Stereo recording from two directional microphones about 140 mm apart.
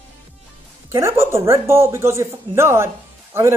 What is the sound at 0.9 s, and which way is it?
A man's voice, 20° right (ahead or behind).